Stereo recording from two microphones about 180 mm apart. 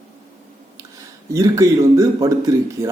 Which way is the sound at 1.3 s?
15° right (ahead or behind).